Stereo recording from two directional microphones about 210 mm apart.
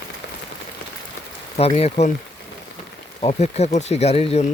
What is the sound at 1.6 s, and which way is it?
Speech, 30° left (ahead or behind).